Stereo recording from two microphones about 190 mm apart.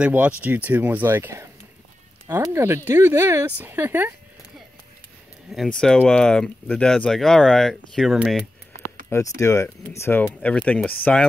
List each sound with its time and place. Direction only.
0.0 s speech: 5° right (ahead or behind)
5.5 s speech: centre (ahead or behind)
9.4 s speech: 15° left (ahead or behind)